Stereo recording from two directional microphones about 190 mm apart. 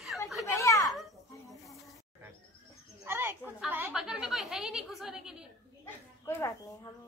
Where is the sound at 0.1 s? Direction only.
5° right (ahead or behind).